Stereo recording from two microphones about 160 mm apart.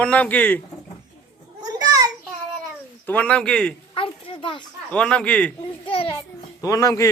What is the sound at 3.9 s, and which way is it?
Speech, 35° left (ahead or behind).